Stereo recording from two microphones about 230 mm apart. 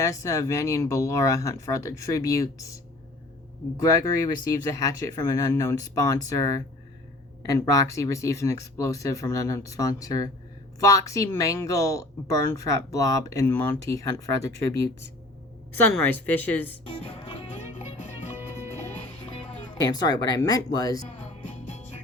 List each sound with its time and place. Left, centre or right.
0.0 s speech: centre
16.0 s speech: centre
16.9 s music: left
19.8 s speech: centre
21.7 s music: left